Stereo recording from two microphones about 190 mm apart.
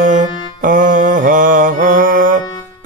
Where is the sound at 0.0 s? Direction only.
45° right (ahead or behind).